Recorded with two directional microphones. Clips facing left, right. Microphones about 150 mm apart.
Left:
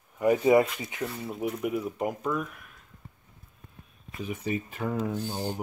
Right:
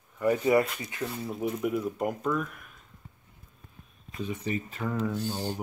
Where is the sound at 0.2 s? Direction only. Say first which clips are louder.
Left 3 dB; 20° left (ahead or behind).